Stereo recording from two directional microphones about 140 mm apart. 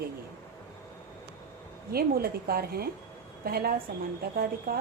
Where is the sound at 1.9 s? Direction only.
90° right.